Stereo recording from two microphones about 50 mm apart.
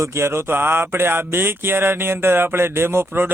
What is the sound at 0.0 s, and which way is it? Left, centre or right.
A man's voice, right.